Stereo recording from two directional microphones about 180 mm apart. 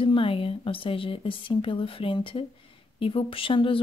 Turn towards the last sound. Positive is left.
turn(degrees=30)  # may be behind; listen again after turning